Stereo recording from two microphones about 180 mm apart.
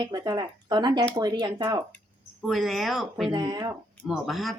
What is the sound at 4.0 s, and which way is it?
Speech, centre (ahead or behind).